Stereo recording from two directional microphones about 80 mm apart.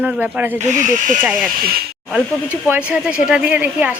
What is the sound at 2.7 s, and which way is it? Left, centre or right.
Speech, centre.